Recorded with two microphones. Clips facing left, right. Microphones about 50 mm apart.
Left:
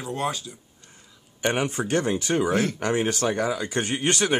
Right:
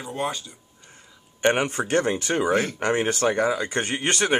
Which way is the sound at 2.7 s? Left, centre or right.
Right.